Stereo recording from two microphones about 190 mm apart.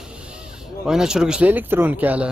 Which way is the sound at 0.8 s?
5° right (ahead or behind).